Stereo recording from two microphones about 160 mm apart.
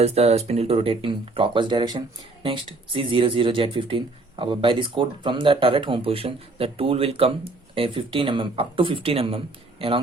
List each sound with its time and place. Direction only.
0.0 s speech: 40° right (ahead or behind)